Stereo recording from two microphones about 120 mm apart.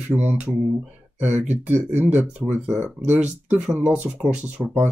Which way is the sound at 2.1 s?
15° right (ahead or behind).